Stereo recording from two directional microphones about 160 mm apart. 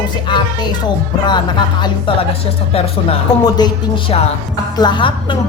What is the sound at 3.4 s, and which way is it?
Speech, 25° left (ahead or behind).